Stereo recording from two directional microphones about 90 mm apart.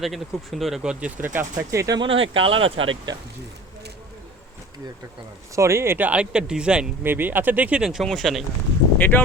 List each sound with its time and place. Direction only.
0.0 s speech: centre (ahead or behind); by 1.5 s 20° right (ahead or behind)
1.5 s speech: 35° right (ahead or behind)
2.0 s speech: 85° right
5.5 s speech: 30° right (ahead or behind); by 6.9 s 10° right (ahead or behind)
7.0 s speech: 25° right (ahead or behind)
7.8 s speech: 5° right (ahead or behind)
9.0 s speech: 20° left (ahead or behind)